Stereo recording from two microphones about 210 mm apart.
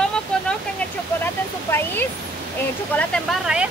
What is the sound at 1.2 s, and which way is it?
Speech, 10° left (ahead or behind).